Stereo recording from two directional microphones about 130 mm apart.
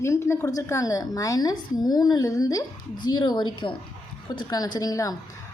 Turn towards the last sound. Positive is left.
turn(degrees=25)  # may be behind; listen again after turning